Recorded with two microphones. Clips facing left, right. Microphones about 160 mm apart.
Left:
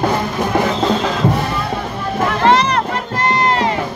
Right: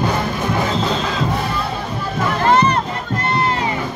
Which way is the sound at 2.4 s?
85° left.